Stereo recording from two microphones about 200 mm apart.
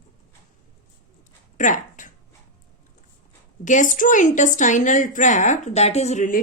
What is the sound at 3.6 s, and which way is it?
A woman's voice, 40° left (ahead or behind).